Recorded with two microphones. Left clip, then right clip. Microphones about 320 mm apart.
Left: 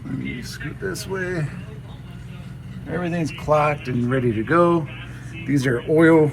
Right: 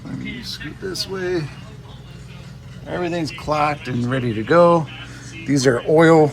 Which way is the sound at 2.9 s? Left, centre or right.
Right.